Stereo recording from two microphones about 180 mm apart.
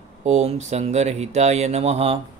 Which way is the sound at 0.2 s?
40° right (ahead or behind).